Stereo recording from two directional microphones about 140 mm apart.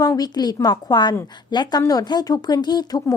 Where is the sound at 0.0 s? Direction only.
25° left (ahead or behind).